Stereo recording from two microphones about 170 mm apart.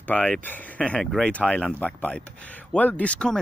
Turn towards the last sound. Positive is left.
turn(degrees=5)  # may be behind; listen again after turning